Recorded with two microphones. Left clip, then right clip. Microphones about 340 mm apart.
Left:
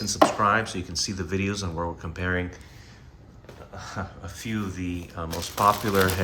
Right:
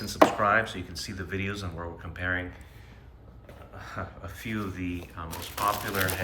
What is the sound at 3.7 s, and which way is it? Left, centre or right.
Speech, centre.